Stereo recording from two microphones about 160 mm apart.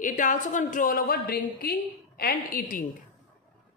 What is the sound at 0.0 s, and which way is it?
A woman's voice, 55° left (ahead or behind).